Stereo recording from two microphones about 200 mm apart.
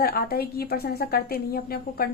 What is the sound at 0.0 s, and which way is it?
A woman's voice, 50° left (ahead or behind).